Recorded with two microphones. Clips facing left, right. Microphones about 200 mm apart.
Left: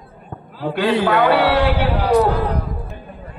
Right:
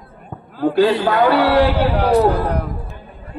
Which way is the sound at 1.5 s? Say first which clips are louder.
Right 3 dB; 35° right (ahead or behind).